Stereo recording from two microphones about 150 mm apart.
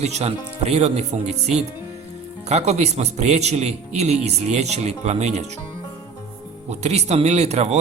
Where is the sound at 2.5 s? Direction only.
45° right (ahead or behind).